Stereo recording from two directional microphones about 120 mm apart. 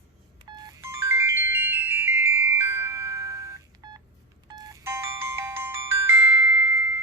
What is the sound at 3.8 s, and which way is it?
Telephone dialing, 30° right (ahead or behind).